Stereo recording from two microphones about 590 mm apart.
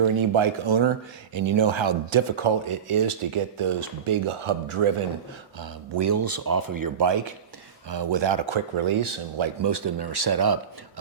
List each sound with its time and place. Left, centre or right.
0.0 s speech: right
5.5 s speech: right